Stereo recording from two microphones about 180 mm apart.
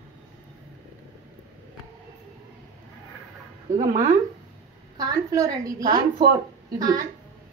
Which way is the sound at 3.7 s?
20° right (ahead or behind).